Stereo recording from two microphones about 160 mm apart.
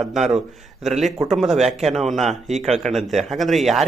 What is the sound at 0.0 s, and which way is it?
Speech, centre (ahead or behind).